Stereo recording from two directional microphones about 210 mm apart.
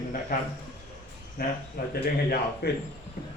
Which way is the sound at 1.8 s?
45° left (ahead or behind).